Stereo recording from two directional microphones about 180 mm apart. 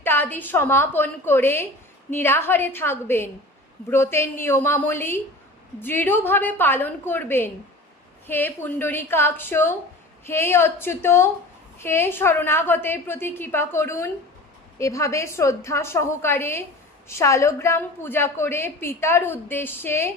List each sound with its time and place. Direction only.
0.0 s a woman's voice: 10° left (ahead or behind)